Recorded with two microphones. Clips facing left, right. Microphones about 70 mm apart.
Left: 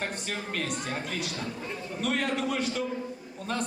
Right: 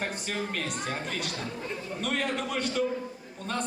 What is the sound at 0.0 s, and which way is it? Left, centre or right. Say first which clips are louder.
A man's voice: right 1 dB; centre.